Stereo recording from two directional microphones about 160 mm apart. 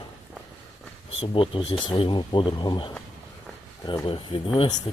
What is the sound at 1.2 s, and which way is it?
Speech, 35° left (ahead or behind).